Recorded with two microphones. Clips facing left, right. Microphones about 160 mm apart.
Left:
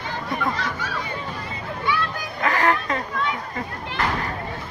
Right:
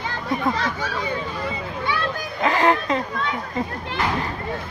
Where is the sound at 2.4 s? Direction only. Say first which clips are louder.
Right 3 dB; 25° right (ahead or behind).